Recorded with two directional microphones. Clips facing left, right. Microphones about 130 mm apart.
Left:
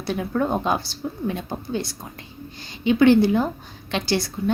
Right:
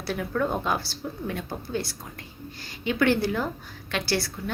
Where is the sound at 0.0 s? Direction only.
20° left (ahead or behind).